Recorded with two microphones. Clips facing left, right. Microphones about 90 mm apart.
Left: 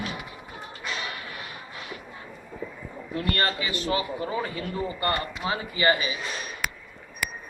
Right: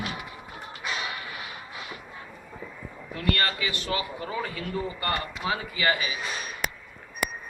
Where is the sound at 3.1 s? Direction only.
30° left (ahead or behind).